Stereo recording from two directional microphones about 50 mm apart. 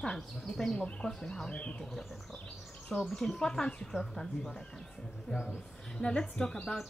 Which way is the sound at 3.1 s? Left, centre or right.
Centre.